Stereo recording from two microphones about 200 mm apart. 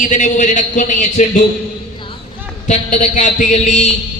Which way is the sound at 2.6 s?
35° left (ahead or behind).